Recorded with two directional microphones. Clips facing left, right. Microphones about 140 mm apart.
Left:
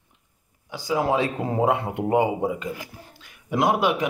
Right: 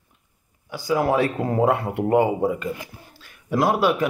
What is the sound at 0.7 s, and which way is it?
Speech, 20° left (ahead or behind).